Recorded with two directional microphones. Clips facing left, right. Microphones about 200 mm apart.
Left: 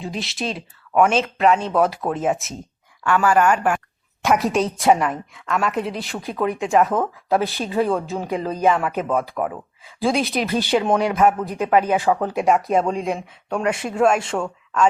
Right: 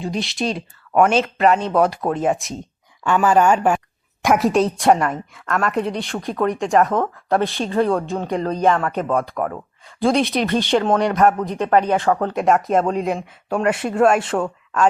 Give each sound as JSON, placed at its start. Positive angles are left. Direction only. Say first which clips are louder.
{"t": 0.0, "sound": "a woman's voice", "louder": "right 4 dB", "side_deg": 0}
{"t": 3.0, "sound": "speech", "louder": "right 2 dB", "side_deg": -20}
{"t": 4.4, "sound": "a woman's voice", "louder": "right 4 dB", "side_deg": 0}